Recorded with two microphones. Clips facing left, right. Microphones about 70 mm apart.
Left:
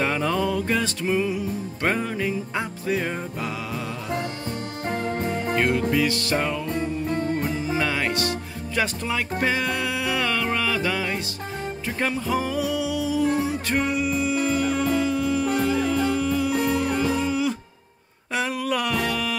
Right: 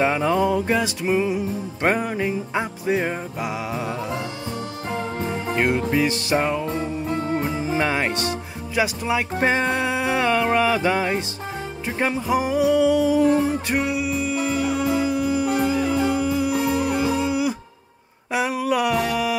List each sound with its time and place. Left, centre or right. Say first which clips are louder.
0.0 s music: right 4 dB; centre
5.4 s music: right 2 dB; centre
8.7 s music: right 4 dB; centre
9.4 s music: right 4 dB; right
12.0 s music: right 3 dB; centre
12.6 s music: right 8 dB; right
13.7 s music: right 1 dB; centre
18.3 s a sound: right 3 dB; centre